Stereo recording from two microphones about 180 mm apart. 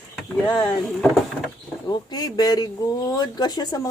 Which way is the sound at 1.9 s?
20° left (ahead or behind).